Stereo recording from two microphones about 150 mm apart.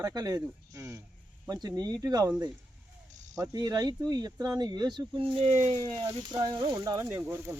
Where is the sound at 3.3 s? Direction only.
25° right (ahead or behind); by 5.8 s 50° right (ahead or behind).